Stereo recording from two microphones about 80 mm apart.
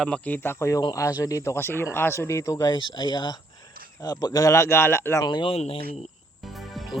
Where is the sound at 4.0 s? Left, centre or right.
Left.